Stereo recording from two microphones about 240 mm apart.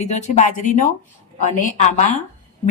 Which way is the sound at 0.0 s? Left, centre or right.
Left.